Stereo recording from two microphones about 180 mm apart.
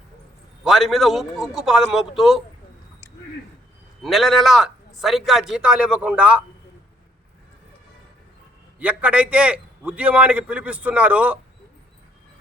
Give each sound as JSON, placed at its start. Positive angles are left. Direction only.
{"t": 0.6, "sound": "a man's voice", "side_deg": 0}
{"t": 4.0, "sound": "a man's voice", "side_deg": 0}
{"t": 8.8, "sound": "a man's voice", "side_deg": -5}